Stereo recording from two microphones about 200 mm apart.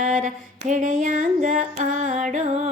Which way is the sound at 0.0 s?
40° right (ahead or behind).